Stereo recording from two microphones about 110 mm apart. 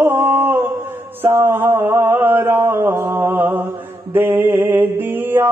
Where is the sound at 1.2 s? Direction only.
20° right (ahead or behind).